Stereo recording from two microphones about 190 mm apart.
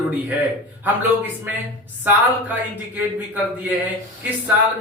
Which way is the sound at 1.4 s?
10° right (ahead or behind).